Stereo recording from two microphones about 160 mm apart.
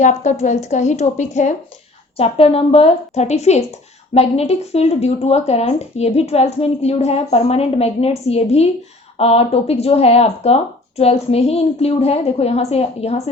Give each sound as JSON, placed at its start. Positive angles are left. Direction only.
{"t": 0.0, "sound": "speech", "side_deg": 45}